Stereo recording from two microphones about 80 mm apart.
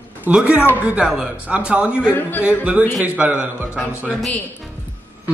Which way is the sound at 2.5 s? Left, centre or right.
Centre.